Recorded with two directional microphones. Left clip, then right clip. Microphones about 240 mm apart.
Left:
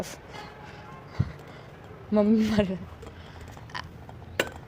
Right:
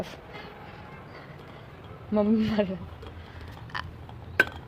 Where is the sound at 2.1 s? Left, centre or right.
Centre.